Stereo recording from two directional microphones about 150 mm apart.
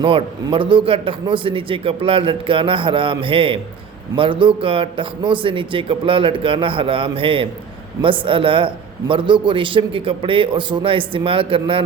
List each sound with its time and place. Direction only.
0.0 s a man's voice: 35° right (ahead or behind)